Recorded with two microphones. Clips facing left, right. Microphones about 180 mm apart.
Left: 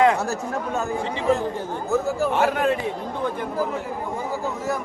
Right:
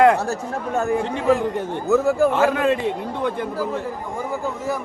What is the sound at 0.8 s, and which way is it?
A man's voice, 65° right (ahead or behind).